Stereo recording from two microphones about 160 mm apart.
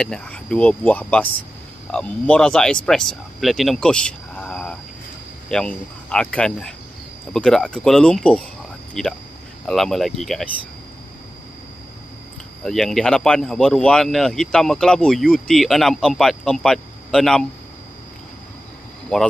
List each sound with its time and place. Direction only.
0.0 s speech: 5° left (ahead or behind)
12.6 s speech: centre (ahead or behind)
19.1 s speech: 5° left (ahead or behind)